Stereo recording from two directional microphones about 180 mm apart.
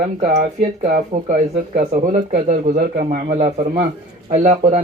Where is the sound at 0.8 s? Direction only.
55° right (ahead or behind).